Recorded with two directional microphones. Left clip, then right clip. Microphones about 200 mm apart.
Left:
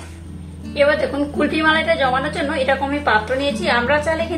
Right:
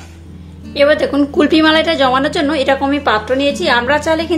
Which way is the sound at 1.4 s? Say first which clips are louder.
Right 6 dB; 50° right (ahead or behind).